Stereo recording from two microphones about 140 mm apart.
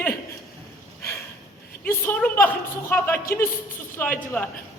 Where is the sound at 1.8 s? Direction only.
15° left (ahead or behind).